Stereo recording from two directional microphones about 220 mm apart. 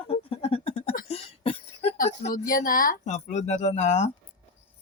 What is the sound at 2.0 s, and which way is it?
Speech, 40° left (ahead or behind).